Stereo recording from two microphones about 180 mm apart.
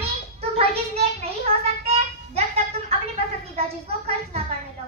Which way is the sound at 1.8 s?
35° right (ahead or behind).